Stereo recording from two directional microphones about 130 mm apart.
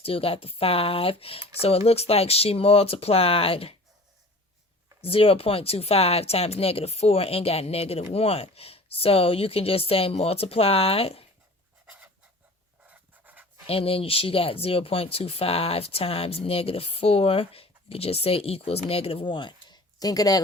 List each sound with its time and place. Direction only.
0.0 s speech: 45° left (ahead or behind)
5.0 s speech: 45° left (ahead or behind)
12.9 s rub: 10° right (ahead or behind)
13.7 s speech: 45° left (ahead or behind); by 20.4 s 30° left (ahead or behind)